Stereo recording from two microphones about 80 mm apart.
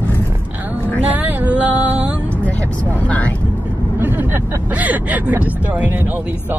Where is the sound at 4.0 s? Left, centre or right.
Right.